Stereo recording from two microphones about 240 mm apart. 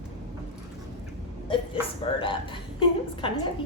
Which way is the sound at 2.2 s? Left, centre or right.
Left.